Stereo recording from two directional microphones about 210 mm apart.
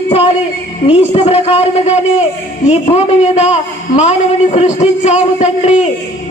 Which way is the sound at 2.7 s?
30° left (ahead or behind).